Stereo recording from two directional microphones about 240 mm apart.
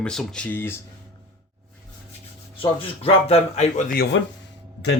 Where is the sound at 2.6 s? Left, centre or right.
Left.